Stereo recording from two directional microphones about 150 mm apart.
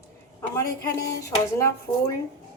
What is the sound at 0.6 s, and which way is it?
Speech, 20° left (ahead or behind).